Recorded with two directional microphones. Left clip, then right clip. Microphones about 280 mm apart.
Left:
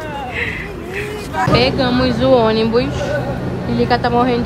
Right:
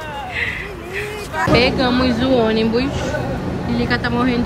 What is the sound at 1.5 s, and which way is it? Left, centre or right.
A woman's voice, centre.